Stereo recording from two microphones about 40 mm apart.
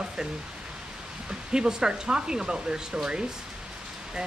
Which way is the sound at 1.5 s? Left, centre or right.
Centre.